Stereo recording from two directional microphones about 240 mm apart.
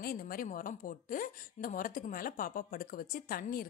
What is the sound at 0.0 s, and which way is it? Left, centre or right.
A woman's voice, left.